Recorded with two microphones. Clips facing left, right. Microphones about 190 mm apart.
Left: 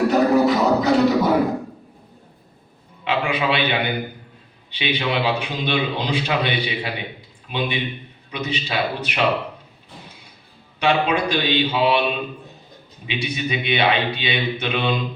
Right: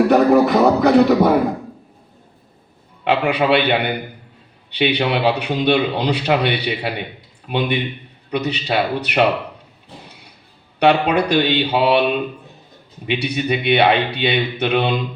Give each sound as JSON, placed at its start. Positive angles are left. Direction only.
{"t": 0.1, "sound": "a sound", "side_deg": -60}
{"t": 3.0, "sound": "a man's voice", "side_deg": -65}
{"t": 10.8, "sound": "a man's voice", "side_deg": -65}